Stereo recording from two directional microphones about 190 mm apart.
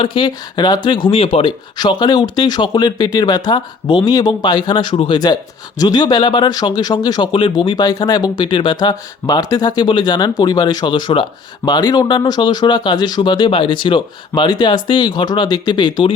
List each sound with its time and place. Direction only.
0.0 s speech: 25° left (ahead or behind)